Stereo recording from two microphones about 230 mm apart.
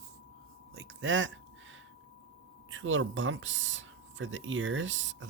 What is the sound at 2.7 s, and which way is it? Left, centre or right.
Speech, right.